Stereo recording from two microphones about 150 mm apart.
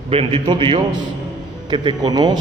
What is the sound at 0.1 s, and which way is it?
A man's voice, 40° right (ahead or behind).